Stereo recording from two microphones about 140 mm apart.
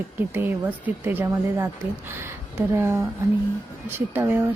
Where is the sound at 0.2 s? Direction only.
15° right (ahead or behind).